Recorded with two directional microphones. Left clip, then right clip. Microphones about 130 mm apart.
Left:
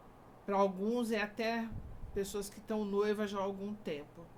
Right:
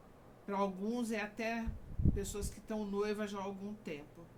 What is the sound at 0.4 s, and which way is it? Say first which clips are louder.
A woman's voice: left 5 dB; 25° left (ahead or behind).